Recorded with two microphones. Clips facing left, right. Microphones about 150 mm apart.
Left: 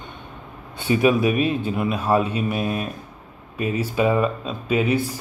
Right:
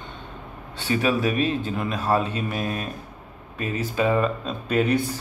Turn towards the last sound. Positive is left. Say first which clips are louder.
# left 1 dB
turn(degrees=5)  # may be behind; listen again after turning